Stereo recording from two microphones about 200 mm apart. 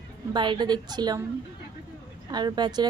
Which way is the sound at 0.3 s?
20° right (ahead or behind).